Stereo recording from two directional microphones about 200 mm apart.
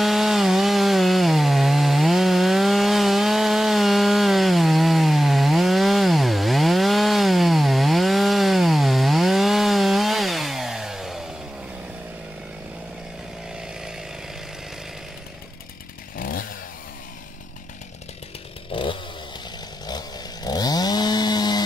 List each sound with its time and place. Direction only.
0.0 s wood: centre (ahead or behind)
13.5 s chainsaw: 5° right (ahead or behind)
16.2 s chainsaw: 45° left (ahead or behind)
18.7 s chainsaw: 25° left (ahead or behind)